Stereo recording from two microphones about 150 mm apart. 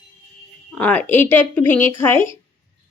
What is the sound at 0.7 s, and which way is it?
Speech, 10° left (ahead or behind).